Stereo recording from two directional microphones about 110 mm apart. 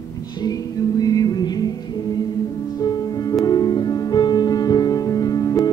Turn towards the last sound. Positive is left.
turn(degrees=30)  # may be behind; listen again after turning